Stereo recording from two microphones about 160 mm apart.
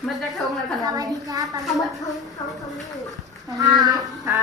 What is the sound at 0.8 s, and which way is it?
Speech, 25° right (ahead or behind).